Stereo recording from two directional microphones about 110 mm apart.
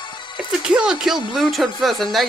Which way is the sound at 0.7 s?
5° right (ahead or behind).